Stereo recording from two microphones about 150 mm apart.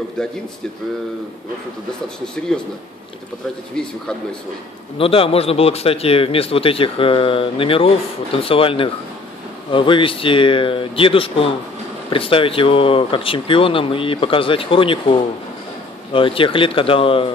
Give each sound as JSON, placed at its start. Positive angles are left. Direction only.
{"t": 0.2, "sound": "speech", "side_deg": 5}
{"t": 3.8, "sound": "speech", "side_deg": 5}
{"t": 4.9, "sound": "speech", "side_deg": 40}